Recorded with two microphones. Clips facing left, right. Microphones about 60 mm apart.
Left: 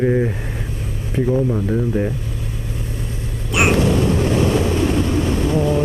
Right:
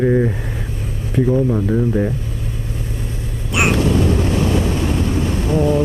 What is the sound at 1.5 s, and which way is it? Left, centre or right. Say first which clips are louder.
Speech: right 2 dB; centre.